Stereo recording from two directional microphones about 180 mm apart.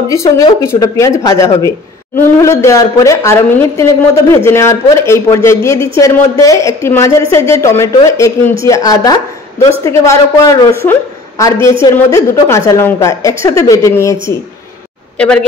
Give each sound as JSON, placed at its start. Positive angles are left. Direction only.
{"t": 0.1, "sound": "a woman's voice", "side_deg": 20}
{"t": 15.1, "sound": "speech", "side_deg": 5}